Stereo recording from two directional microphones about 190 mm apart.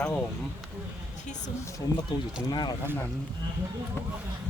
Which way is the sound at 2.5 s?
20° left (ahead or behind).